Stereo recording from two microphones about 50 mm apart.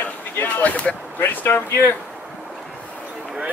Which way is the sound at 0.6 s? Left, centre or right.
Left.